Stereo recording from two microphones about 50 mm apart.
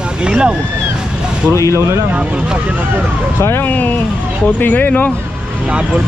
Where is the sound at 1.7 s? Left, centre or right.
Right.